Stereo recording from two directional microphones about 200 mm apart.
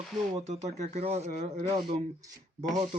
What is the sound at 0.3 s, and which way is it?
Speech, 35° right (ahead or behind).